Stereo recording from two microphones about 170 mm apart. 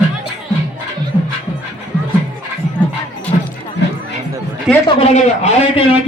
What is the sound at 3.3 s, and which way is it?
Music, 40° left (ahead or behind).